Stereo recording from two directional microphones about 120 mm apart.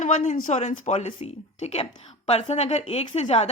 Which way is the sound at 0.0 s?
90° left.